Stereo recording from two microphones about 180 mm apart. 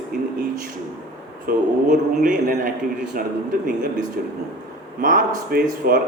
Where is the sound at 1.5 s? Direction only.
55° right (ahead or behind).